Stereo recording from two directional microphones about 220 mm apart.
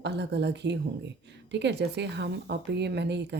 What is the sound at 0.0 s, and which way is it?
Speech, 50° right (ahead or behind).